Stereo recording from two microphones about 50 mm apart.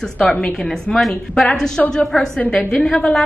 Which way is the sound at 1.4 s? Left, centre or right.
Centre.